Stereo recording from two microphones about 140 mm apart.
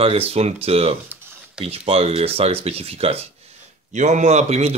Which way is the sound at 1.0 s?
15° right (ahead or behind).